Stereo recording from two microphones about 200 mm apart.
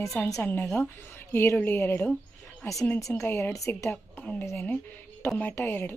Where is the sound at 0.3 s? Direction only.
10° left (ahead or behind).